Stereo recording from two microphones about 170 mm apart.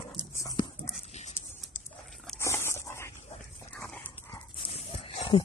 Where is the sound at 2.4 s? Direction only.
15° left (ahead or behind).